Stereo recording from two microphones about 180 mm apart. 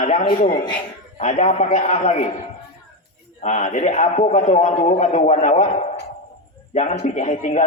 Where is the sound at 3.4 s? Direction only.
40° left (ahead or behind).